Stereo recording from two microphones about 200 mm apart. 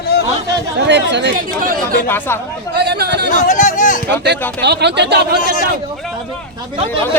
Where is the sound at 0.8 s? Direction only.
60° right (ahead or behind).